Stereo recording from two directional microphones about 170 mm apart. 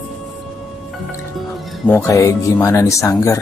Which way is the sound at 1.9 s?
15° left (ahead or behind).